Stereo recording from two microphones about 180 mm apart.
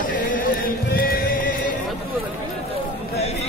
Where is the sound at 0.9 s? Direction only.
55° left (ahead or behind).